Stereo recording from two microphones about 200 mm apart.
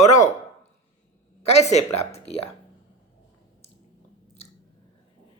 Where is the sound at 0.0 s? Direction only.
15° left (ahead or behind).